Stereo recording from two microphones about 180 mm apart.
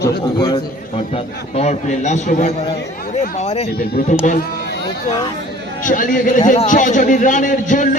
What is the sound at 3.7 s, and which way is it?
Speech, 60° left (ahead or behind).